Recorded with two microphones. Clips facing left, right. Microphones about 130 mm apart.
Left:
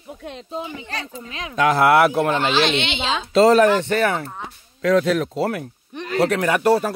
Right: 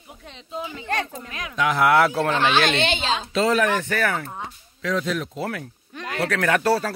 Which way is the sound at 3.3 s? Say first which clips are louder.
Left 8 dB; 35° left (ahead or behind).